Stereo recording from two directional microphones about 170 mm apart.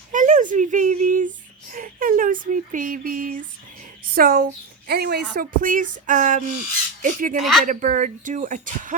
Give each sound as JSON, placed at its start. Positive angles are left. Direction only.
{"t": 0.1, "sound": "a sound", "side_deg": -50}
{"t": 2.5, "sound": "a woman's voice", "side_deg": -55}
{"t": 4.9, "sound": "a woman's voice", "side_deg": -70}
{"t": 5.4, "sound": "speech", "side_deg": -50}
{"t": 7.3, "sound": "speech", "side_deg": 0}
{"t": 7.6, "sound": "speech", "side_deg": -50}